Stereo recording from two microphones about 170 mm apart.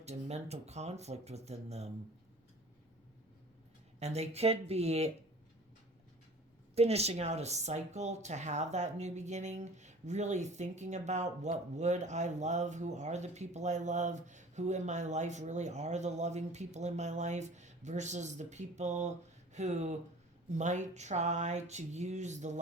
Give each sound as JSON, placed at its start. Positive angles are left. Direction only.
{"t": 0.0, "sound": "speech", "side_deg": -40}
{"t": 4.0, "sound": "speech", "side_deg": -40}
{"t": 6.7, "sound": "speech", "side_deg": -40}